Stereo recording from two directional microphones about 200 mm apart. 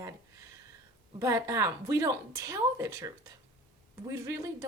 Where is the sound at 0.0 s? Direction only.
15° right (ahead or behind).